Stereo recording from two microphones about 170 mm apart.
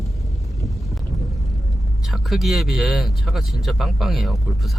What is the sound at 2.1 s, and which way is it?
Speech, centre (ahead or behind).